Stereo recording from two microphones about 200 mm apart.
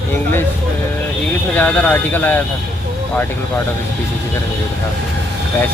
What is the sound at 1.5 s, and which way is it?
Speech, 5° left (ahead or behind).